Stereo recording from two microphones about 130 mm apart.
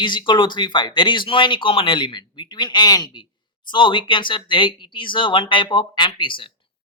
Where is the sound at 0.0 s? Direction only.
35° left (ahead or behind).